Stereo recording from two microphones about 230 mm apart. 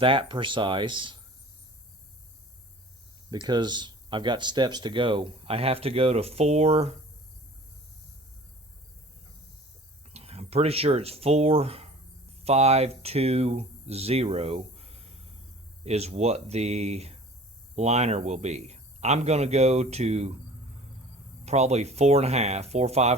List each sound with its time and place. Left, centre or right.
0.0 s speech: right
3.2 s speech: centre
10.1 s speech: right
21.4 s speech: right